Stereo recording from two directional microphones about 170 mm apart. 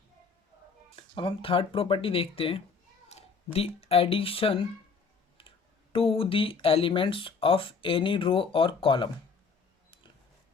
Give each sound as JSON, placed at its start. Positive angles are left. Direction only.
{"t": 0.9, "sound": "speech", "side_deg": 30}
{"t": 5.9, "sound": "speech", "side_deg": 35}